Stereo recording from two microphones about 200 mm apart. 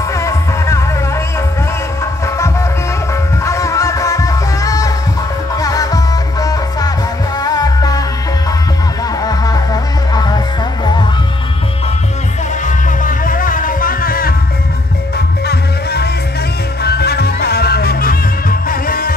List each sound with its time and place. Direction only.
0.1 s music: 15° left (ahead or behind)
2.2 s music: 15° left (ahead or behind)
9.2 s music: 20° left (ahead or behind)
12.6 s music: 45° left (ahead or behind)
15.4 s music: 55° left (ahead or behind)